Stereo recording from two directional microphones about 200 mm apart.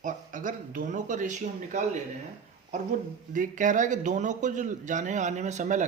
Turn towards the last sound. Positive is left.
turn(degrees=-35)  # may be behind; listen again after turning